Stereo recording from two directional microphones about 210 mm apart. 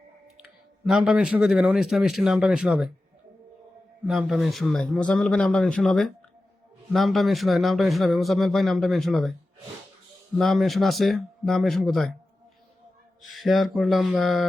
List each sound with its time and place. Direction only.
0.9 s a man's voice: centre (ahead or behind)
4.0 s a man's voice: centre (ahead or behind)
10.3 s a man's voice: centre (ahead or behind)
13.3 s a man's voice: centre (ahead or behind)